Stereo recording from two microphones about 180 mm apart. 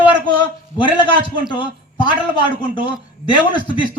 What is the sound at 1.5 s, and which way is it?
A man's voice, 25° left (ahead or behind).